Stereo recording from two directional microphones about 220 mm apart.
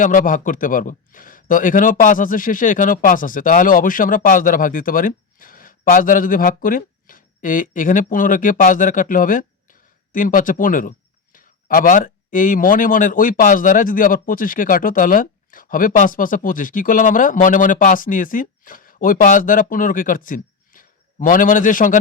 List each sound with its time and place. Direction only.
0.0 s a man's voice: 35° left (ahead or behind)